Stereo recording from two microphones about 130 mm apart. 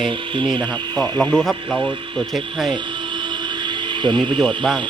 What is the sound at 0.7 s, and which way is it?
Speech, 15° left (ahead or behind).